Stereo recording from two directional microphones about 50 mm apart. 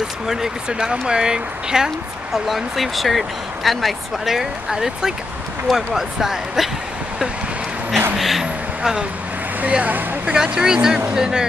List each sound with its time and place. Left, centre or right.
0.3 s speech: centre
2.3 s speech: centre
8.2 s speech: centre
9.6 s speech: right
10.3 s speech: centre